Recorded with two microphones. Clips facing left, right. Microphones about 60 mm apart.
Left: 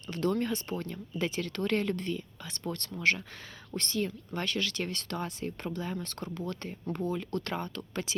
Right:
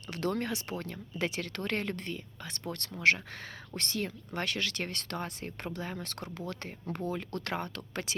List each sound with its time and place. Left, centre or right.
0.1 s speech: right